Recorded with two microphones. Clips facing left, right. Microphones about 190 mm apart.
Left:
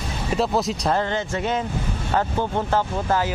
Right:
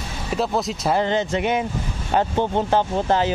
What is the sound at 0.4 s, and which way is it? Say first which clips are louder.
Speech: even; centre (ahead or behind).